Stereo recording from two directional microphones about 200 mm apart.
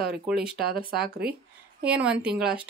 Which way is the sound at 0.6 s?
50° right (ahead or behind).